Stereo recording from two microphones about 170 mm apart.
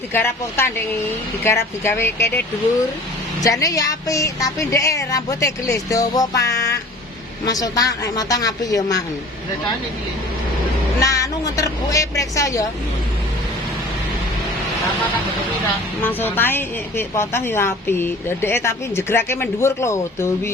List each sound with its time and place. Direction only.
0.1 s a woman's voice: 15° left (ahead or behind)
3.4 s speech: 20° left (ahead or behind)
11.0 s speech: 20° left (ahead or behind)
16.0 s a woman's voice: 10° left (ahead or behind)